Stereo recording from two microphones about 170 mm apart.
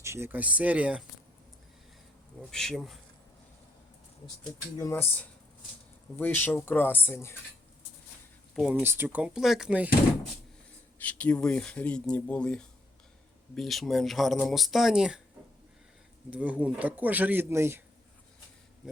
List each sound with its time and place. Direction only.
0.0 s speech: 15° right (ahead or behind)
2.5 s speech: 5° left (ahead or behind)
4.8 s speech: 15° left (ahead or behind)
6.1 s speech: 10° left (ahead or behind)
8.5 s speech: centre (ahead or behind)
8.8 s speech: 15° right (ahead or behind)
10.9 s speech: 10° left (ahead or behind)
16.3 s speech: 10° right (ahead or behind)